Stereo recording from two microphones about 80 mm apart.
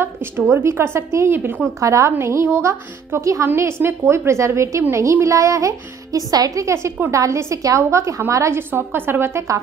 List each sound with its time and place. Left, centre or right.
0.4 s speech: right
1.8 s a woman's voice: right